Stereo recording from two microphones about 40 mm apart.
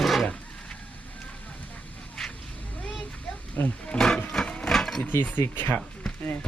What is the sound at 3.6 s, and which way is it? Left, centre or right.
Speech, left.